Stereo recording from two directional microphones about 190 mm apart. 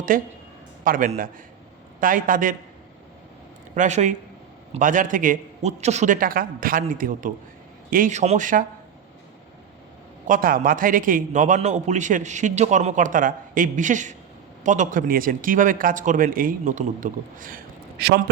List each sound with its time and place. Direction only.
0.1 s speech: 45° right (ahead or behind)
3.8 s a man's voice: 40° right (ahead or behind)
10.2 s a man's voice: 45° right (ahead or behind)